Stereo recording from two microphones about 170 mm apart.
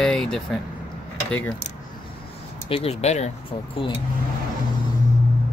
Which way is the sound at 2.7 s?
35° left (ahead or behind).